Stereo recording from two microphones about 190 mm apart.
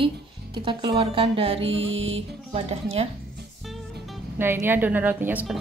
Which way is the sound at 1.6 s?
85° right.